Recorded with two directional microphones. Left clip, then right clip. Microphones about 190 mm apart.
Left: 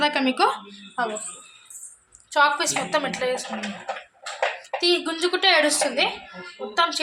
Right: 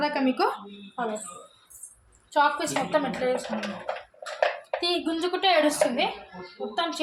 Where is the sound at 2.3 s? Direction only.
Centre (ahead or behind).